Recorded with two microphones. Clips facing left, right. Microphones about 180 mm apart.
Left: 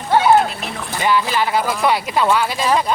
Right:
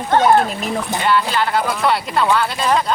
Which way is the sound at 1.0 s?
10° left (ahead or behind).